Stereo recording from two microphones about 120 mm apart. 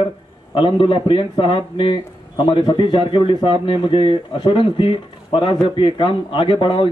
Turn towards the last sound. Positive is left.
turn(degrees=45)  # may be behind; listen again after turning